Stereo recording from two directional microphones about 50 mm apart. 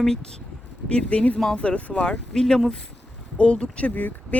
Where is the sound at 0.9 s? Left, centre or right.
Left.